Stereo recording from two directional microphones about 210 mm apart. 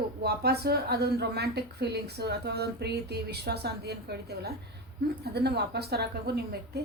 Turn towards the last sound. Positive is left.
turn(degrees=-50)  # may be behind; listen again after turning